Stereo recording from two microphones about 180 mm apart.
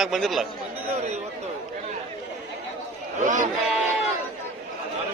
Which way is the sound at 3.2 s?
45° right (ahead or behind).